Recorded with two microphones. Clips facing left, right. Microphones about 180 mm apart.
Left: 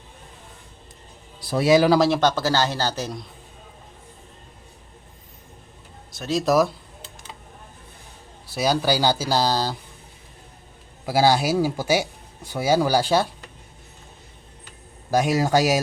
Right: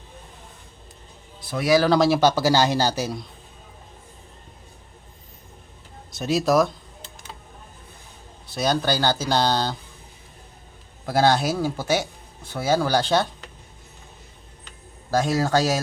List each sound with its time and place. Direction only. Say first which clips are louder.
1.4 s speech: left 5 dB; 35° left (ahead or behind)
1.6 s speech: left 2 dB; 20° left (ahead or behind)
1.9 s speech: even; centre (ahead or behind)
6.1 s a sound: right 4 dB; 20° right (ahead or behind)
6.3 s speech: even; centre (ahead or behind)
8.5 s speech: left 1 dB; 5° left (ahead or behind)
11.0 s speech: left 1 dB; 5° left (ahead or behind)
15.1 s speech: left 1 dB; 15° left (ahead or behind)